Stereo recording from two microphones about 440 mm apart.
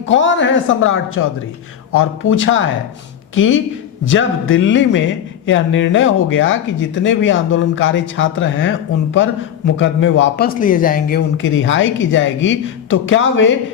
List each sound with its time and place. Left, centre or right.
0.1 s a man's voice: left